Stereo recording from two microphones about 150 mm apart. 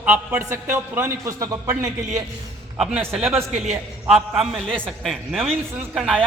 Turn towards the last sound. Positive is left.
turn(degrees=0)  # may be behind; listen again after turning